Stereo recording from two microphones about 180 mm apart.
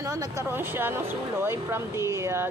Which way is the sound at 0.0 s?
20° right (ahead or behind).